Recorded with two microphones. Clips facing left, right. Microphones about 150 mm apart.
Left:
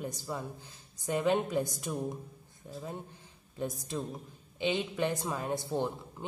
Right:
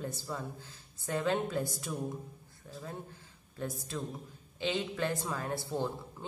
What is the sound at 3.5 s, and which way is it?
Speech, 20° left (ahead or behind).